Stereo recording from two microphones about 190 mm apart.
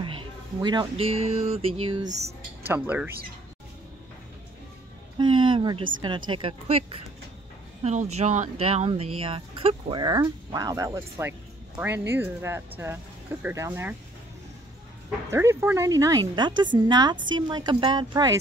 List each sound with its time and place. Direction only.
0.0 s speech: 25° right (ahead or behind)
2.7 s speech: 10° right (ahead or behind)
5.1 s a sound: 25° right (ahead or behind)
5.9 s speech: 25° right (ahead or behind)
7.8 s speech: 35° right (ahead or behind); by 13.9 s 15° right (ahead or behind)
15.3 s speech: 15° right (ahead or behind)